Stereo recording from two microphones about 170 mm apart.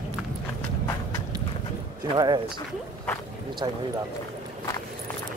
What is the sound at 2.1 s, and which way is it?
Speech, 25° right (ahead or behind).